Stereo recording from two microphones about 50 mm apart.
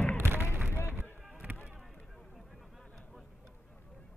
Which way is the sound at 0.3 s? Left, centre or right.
Right.